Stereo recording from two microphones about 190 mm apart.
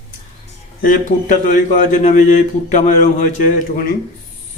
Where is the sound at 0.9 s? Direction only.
40° left (ahead or behind).